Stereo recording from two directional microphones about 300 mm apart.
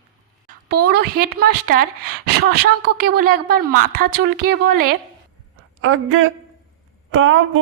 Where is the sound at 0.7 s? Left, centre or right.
Right.